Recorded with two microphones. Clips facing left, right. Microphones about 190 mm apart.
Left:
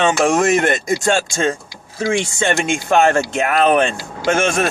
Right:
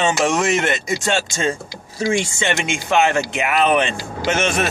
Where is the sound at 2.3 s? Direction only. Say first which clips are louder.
Left 4 dB; 45° left (ahead or behind).